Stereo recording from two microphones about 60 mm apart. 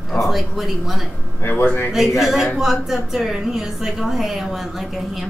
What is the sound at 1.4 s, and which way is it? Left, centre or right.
Speech, left.